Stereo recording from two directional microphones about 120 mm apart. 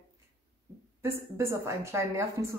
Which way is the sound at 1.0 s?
25° right (ahead or behind).